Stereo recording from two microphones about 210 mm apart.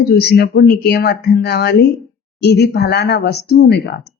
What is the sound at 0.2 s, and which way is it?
Speech, 50° left (ahead or behind).